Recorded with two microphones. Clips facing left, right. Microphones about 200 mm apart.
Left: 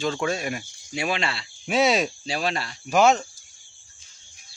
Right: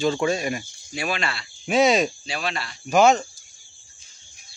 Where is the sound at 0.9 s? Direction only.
25° left (ahead or behind).